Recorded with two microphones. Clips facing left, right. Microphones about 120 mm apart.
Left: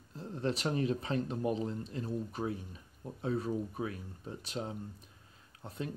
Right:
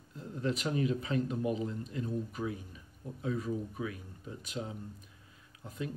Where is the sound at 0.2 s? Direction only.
30° left (ahead or behind).